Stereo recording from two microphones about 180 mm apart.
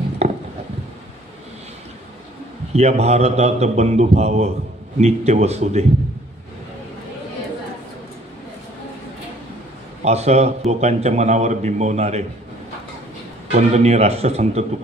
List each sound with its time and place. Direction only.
0.2 s a sound: 35° right (ahead or behind)
2.7 s a man's voice: 35° right (ahead or behind)
10.0 s a man's voice: 35° right (ahead or behind)
13.5 s a man's voice: 40° right (ahead or behind)